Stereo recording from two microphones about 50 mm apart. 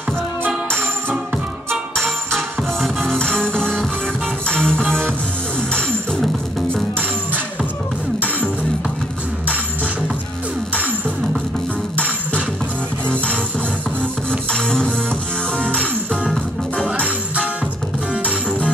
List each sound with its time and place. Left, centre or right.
1.7 s music: centre
14.5 s music: centre